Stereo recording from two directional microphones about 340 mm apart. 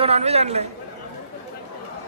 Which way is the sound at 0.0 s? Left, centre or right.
Centre.